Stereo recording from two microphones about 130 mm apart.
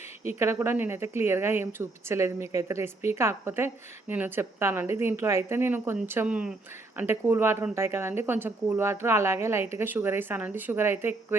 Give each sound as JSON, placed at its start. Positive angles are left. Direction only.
{"t": 0.3, "sound": "a woman's voice", "side_deg": -20}